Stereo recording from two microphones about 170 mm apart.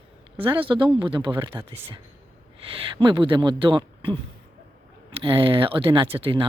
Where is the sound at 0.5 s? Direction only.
30° right (ahead or behind).